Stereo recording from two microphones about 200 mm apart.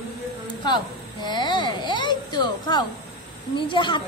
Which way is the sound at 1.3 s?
20° left (ahead or behind).